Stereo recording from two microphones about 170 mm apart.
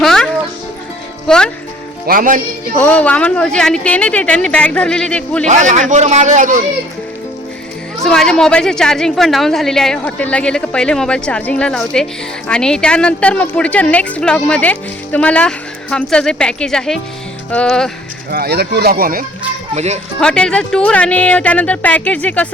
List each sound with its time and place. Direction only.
0.0 s music: 5° left (ahead or behind)
1.3 s a woman's voice: 5° left (ahead or behind)
2.0 s speech: 55° right (ahead or behind)
2.7 s speech: 10° left (ahead or behind)
5.5 s speech: 45° right (ahead or behind)
8.0 s a woman's voice: 5° left (ahead or behind)
18.3 s speech: 70° right (ahead or behind)
19.7 s speech: 40° right (ahead or behind)
20.1 s speech: 5° left (ahead or behind)